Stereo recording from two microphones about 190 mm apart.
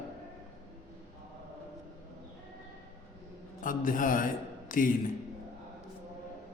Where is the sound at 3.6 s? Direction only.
45° left (ahead or behind).